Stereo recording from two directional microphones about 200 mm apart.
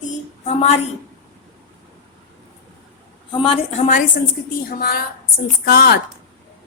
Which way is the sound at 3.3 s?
25° left (ahead or behind).